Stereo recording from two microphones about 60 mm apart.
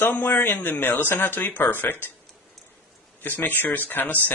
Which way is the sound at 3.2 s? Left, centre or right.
Left.